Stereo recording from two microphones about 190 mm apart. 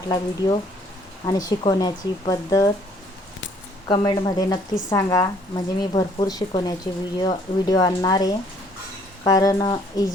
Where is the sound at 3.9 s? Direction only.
25° left (ahead or behind).